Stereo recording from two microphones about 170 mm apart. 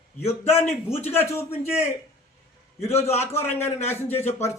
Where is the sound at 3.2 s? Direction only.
15° left (ahead or behind).